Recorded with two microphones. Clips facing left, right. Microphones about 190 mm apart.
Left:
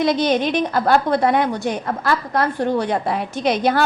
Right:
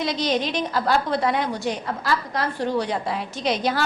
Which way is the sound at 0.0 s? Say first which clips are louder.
Left 6 dB; 55° left (ahead or behind).